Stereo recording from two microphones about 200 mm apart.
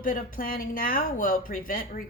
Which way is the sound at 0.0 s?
45° left (ahead or behind).